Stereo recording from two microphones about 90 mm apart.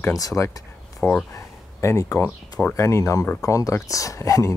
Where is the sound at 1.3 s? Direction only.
35° left (ahead or behind).